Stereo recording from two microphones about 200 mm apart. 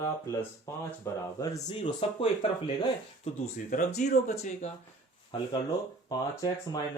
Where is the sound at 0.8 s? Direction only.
15° left (ahead or behind).